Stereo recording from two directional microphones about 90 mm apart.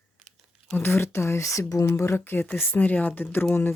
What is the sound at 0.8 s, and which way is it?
Speech, 25° left (ahead or behind).